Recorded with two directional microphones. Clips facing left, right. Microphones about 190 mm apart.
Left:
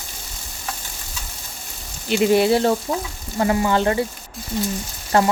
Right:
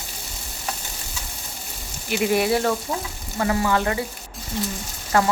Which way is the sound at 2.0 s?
25° left (ahead or behind).